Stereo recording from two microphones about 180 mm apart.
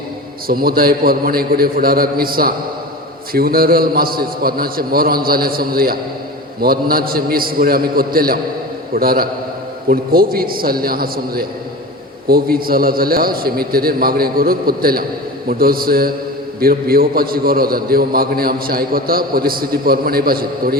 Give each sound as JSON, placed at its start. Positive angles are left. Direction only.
{"t": 0.4, "sound": "a man's voice", "side_deg": -55}